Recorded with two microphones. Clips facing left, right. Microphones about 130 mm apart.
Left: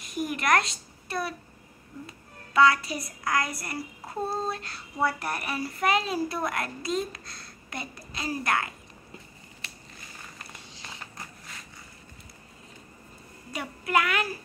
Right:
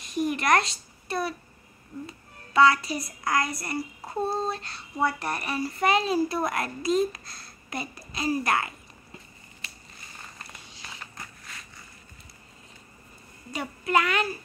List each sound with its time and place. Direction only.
0.0 s a woman's voice: 5° left (ahead or behind)
13.5 s a woman's voice: 5° left (ahead or behind)